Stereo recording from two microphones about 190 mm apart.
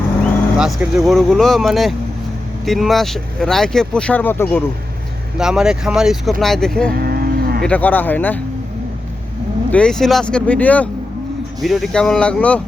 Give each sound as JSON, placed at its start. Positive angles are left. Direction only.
{"t": 0.6, "sound": "speech", "side_deg": -5}
{"t": 5.4, "sound": "speech", "side_deg": -5}
{"t": 6.9, "sound": "livestock", "side_deg": -55}
{"t": 7.6, "sound": "speech", "side_deg": 10}
{"t": 9.7, "sound": "speech", "side_deg": 5}